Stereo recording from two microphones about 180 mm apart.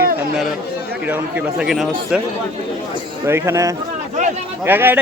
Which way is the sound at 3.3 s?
15° right (ahead or behind).